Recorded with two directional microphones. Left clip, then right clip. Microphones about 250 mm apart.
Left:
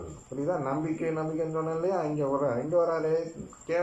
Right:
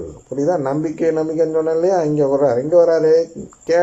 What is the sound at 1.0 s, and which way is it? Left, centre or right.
A man's voice, right.